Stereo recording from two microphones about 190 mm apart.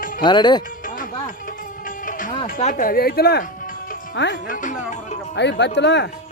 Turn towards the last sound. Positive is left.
turn(degrees=65)  # may be behind; listen again after turning